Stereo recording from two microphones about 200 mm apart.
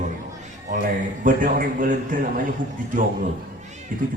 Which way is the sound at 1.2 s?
45° right (ahead or behind).